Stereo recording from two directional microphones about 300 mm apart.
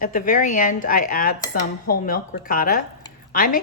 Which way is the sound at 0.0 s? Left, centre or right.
Left.